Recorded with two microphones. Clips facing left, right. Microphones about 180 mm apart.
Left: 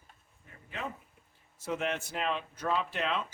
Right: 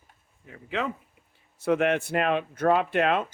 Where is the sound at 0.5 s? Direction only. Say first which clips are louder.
Right 10 dB; 90° right.